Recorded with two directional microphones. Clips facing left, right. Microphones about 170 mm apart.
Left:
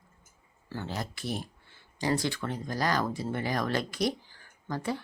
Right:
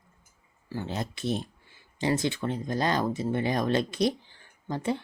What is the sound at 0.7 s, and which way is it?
Speech, 20° right (ahead or behind).